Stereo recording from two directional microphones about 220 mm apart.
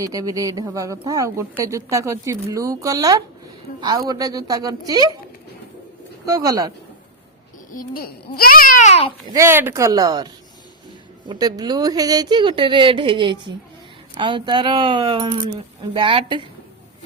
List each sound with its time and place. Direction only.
0.0 s speech: 15° right (ahead or behind)
6.2 s speech: 15° right (ahead or behind)
7.7 s a child's voice: 40° left (ahead or behind)
9.3 s speech: 10° right (ahead or behind)
11.3 s speech: 20° right (ahead or behind)